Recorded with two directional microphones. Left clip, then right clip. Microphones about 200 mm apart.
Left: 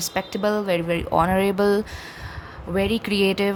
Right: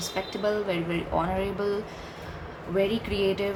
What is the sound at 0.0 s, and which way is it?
Speech, 60° left (ahead or behind).